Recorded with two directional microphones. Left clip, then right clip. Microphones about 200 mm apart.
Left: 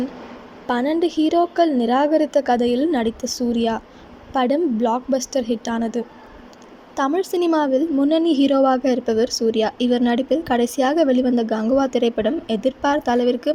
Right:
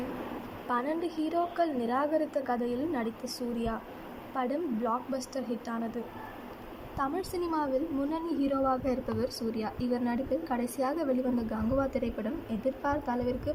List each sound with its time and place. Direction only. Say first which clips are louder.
0.7 s a woman's voice: left 11 dB; 35° left (ahead or behind)